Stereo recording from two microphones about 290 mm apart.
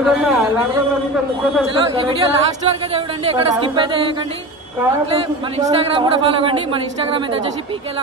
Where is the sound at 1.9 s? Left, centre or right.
Centre.